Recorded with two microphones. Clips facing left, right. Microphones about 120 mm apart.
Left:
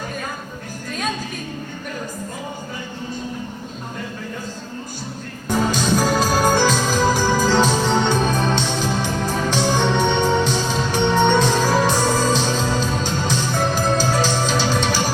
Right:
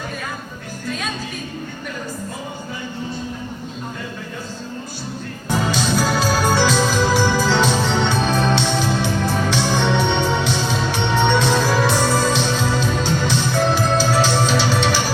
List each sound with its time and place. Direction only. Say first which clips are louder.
5.5 s organ: left 1 dB; 45° left (ahead or behind)
9.5 s music: left 2 dB; 45° left (ahead or behind)